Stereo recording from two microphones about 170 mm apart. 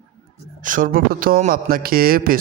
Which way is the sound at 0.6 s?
50° right (ahead or behind).